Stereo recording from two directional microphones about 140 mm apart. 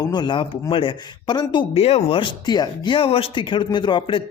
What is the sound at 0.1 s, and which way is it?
Speech, 35° left (ahead or behind).